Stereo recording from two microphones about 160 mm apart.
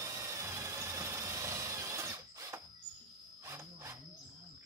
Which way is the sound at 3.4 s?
15° right (ahead or behind).